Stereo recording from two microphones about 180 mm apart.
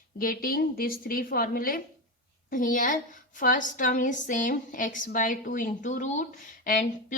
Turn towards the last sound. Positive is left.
turn(degrees=45)  # may be behind; listen again after turning